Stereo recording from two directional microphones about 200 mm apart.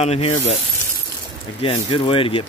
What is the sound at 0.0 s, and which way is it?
Speech, 30° left (ahead or behind).